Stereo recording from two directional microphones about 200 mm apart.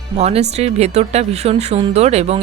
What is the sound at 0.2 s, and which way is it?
Speech, 35° right (ahead or behind).